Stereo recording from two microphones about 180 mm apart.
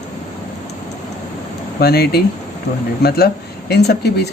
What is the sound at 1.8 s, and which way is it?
Speech, 60° left (ahead or behind).